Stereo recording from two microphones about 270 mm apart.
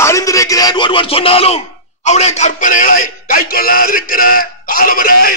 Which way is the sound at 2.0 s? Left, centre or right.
Left.